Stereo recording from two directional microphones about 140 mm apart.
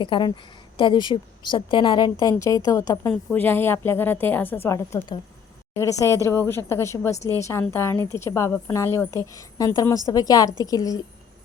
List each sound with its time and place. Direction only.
0.0 s a woman's voice: 35° left (ahead or behind)
3.1 s a woman's voice: 10° left (ahead or behind)